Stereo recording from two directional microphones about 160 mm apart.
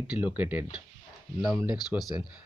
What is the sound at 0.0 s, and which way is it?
Speech, 10° right (ahead or behind).